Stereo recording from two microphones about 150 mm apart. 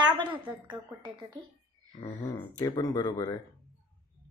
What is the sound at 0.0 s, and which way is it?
A woman's voice, 30° right (ahead or behind).